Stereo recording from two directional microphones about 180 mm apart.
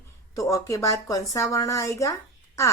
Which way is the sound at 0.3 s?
20° left (ahead or behind).